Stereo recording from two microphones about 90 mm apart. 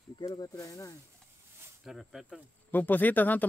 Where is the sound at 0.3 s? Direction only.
40° left (ahead or behind).